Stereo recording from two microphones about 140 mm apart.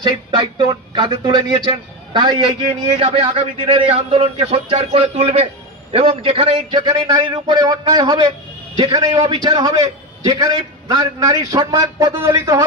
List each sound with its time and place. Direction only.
0.0 s a man's voice: 30° right (ahead or behind)